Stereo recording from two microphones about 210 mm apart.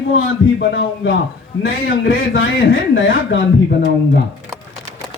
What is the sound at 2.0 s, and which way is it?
A man's voice, 70° left (ahead or behind).